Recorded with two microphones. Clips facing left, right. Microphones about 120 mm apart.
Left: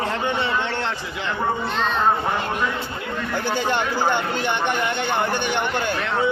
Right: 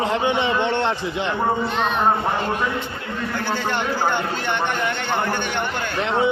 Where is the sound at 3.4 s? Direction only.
15° left (ahead or behind).